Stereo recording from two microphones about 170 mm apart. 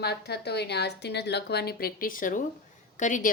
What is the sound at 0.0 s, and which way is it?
A woman's voice, 75° left (ahead or behind).